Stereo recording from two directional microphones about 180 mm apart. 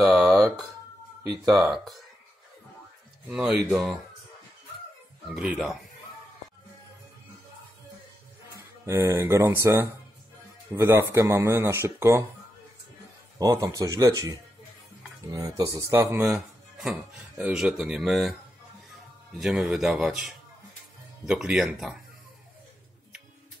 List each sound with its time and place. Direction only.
0.0 s a sound: centre (ahead or behind)
1.5 s speech: centre (ahead or behind)
3.3 s speech: 5° right (ahead or behind)
5.3 s speech: 5° right (ahead or behind)
8.5 s speech: 15° right (ahead or behind)
13.4 s speech: 20° right (ahead or behind)
16.3 s a sound: centre (ahead or behind)
17.4 s speech: 5° right (ahead or behind)
19.4 s speech: 5° right (ahead or behind)
21.3 s speech: 5° right (ahead or behind)